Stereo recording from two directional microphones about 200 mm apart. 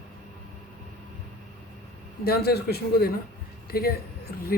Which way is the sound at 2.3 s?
50° left (ahead or behind).